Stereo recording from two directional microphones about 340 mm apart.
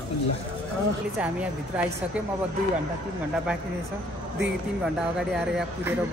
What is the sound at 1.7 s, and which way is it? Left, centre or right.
Speech, centre.